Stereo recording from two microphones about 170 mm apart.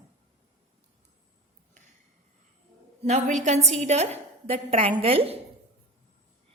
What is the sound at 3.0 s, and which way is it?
A woman's voice, 40° right (ahead or behind).